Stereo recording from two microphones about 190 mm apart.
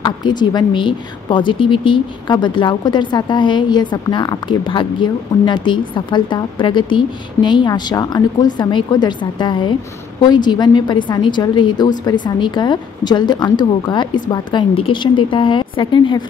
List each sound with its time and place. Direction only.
0.0 s speech: 25° left (ahead or behind)